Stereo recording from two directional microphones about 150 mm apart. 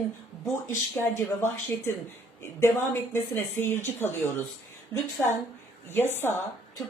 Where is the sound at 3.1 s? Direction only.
15° left (ahead or behind).